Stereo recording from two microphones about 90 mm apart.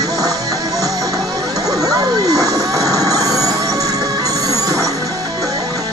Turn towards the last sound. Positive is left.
turn(degrees=-40)  # may be behind; listen again after turning